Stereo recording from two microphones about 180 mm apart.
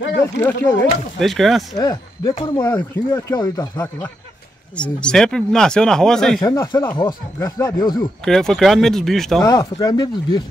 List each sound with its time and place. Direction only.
0.2 s speech: 10° left (ahead or behind)
1.2 s speech: centre (ahead or behind)
1.8 s speech: 20° left (ahead or behind)
4.7 s speech: 5° left (ahead or behind)
6.4 s speech: 20° left (ahead or behind)
8.3 s speech: centre (ahead or behind)
9.4 s speech: 20° left (ahead or behind)